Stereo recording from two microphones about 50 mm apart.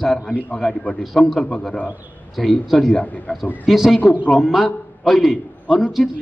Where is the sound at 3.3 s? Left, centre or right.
Left.